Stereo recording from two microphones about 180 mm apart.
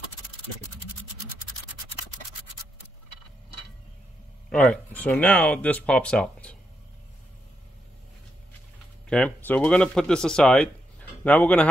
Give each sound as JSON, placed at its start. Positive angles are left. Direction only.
{"t": 4.5, "sound": "speech", "side_deg": 5}
{"t": 9.1, "sound": "speech", "side_deg": 5}